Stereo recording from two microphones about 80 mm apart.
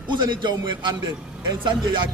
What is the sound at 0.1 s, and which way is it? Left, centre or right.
Speech, right.